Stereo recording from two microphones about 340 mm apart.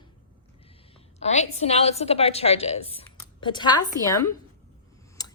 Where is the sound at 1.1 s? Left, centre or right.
Centre.